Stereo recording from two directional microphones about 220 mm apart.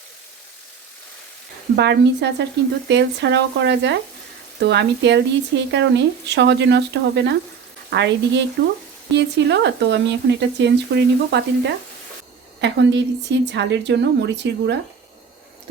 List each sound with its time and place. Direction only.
1.7 s speech: 50° right (ahead or behind)